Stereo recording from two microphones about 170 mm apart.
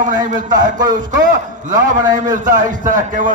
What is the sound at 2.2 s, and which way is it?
A man's voice, 50° right (ahead or behind).